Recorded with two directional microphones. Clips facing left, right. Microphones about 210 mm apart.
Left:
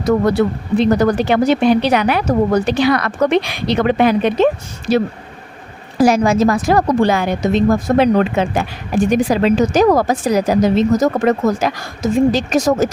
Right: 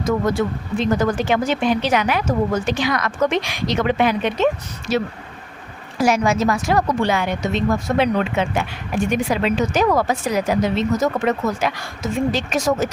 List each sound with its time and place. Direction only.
0.3 s speech: 65° left (ahead or behind)
0.9 s speech: 35° left (ahead or behind)
6.0 s speech: 35° left (ahead or behind)